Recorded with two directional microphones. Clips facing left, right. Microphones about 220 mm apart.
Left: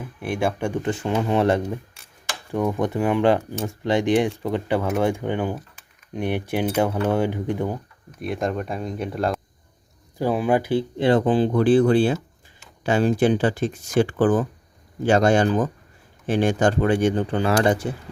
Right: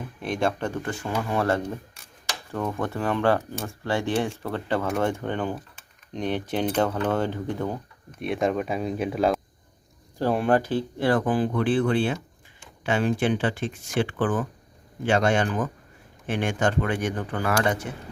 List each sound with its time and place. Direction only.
0.0 s speech: 10° left (ahead or behind)
8.2 s speech: centre (ahead or behind); by 17.9 s 30° left (ahead or behind)